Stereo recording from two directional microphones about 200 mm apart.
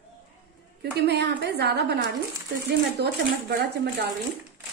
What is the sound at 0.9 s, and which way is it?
A woman's voice, 55° right (ahead or behind).